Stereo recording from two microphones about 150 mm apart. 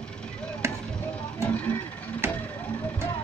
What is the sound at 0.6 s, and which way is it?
Chop, 20° right (ahead or behind).